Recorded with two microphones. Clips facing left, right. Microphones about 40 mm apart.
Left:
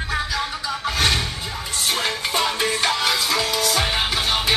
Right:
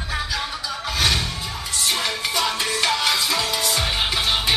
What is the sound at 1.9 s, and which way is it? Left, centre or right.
Music, left.